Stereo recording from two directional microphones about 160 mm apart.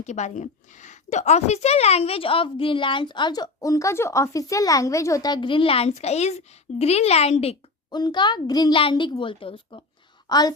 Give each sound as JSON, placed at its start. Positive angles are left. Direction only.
{"t": 0.0, "sound": "a woman's voice", "side_deg": 45}
{"t": 7.9, "sound": "a woman's voice", "side_deg": 25}